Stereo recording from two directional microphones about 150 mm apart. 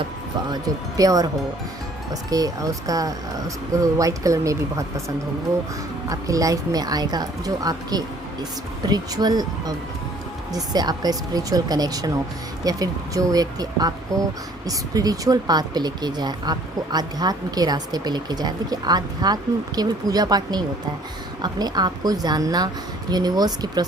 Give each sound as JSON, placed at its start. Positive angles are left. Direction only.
{"t": 0.5, "sound": "speech", "side_deg": -25}
{"t": 2.3, "sound": "speech", "side_deg": -25}